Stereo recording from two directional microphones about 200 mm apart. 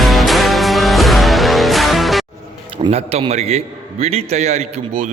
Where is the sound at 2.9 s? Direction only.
30° right (ahead or behind).